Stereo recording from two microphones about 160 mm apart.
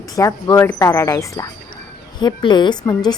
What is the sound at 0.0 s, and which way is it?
A woman's voice, 20° left (ahead or behind).